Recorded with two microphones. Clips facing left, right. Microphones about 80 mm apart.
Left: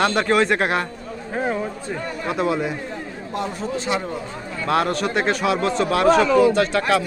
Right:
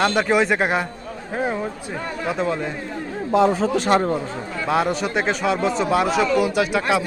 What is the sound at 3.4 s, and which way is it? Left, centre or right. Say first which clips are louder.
Speech: right 7 dB; right.